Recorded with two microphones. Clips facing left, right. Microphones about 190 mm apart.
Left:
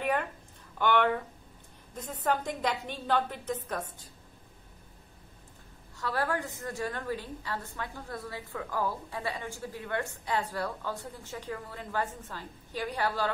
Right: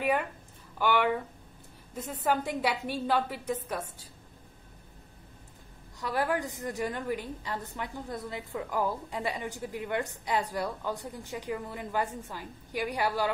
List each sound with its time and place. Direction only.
0.0 s a sound: 10° right (ahead or behind)
0.7 s a woman's voice: 10° right (ahead or behind)
2.2 s a woman's voice: 10° right (ahead or behind)
5.9 s a woman's voice: 15° right (ahead or behind)